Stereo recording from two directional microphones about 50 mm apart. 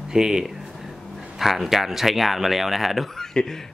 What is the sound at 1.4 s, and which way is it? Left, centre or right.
Speech, centre.